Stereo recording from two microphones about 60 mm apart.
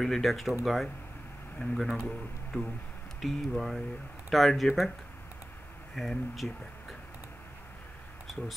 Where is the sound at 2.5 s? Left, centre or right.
Left.